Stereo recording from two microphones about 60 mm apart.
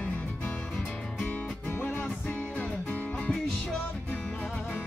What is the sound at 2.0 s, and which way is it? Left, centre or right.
Music, left.